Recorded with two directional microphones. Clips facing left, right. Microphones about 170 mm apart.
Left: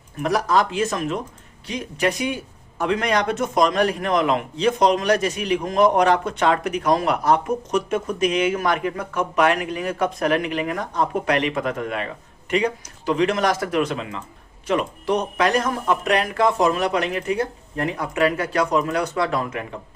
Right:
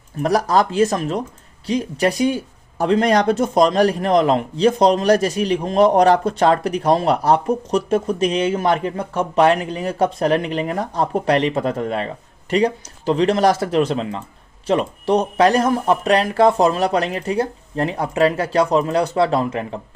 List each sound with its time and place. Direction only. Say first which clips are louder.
0.2 s speech: right 3 dB; 35° right (ahead or behind)